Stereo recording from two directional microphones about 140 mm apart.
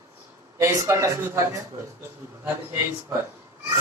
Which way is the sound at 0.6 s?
20° right (ahead or behind).